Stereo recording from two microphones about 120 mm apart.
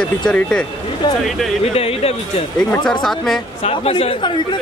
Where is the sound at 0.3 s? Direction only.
10° left (ahead or behind).